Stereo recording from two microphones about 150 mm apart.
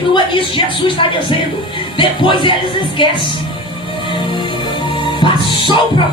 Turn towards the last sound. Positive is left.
turn(degrees=35)  # may be behind; listen again after turning